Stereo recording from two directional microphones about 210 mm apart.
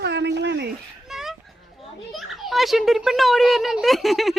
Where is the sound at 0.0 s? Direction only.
55° right (ahead or behind).